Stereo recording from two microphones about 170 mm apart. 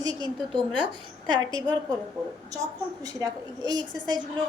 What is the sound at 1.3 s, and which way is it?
Speech, 25° right (ahead or behind).